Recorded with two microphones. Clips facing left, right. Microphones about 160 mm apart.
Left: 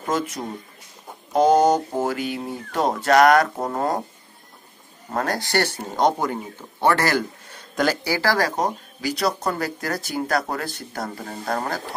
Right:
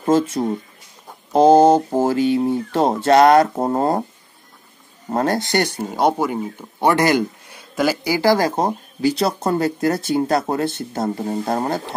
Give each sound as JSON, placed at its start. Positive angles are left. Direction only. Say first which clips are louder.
{"t": 0.0, "sound": "speech", "louder": "right 8 dB", "side_deg": -30}
{"t": 5.1, "sound": "speech", "louder": "right 4 dB", "side_deg": -25}